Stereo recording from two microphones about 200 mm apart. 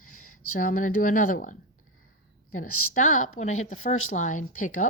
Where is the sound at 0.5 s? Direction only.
45° left (ahead or behind).